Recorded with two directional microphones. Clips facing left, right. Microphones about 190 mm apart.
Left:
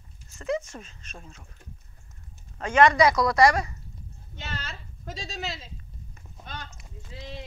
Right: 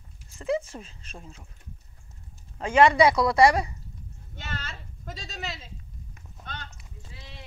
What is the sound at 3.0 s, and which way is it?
Speech, 30° right (ahead or behind).